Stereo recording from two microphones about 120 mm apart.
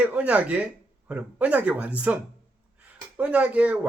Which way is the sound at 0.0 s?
10° right (ahead or behind).